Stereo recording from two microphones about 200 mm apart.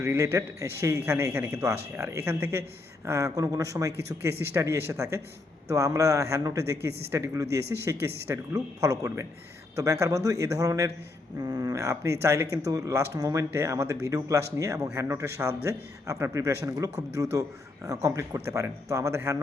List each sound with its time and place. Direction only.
0.0 s speech: 15° right (ahead or behind)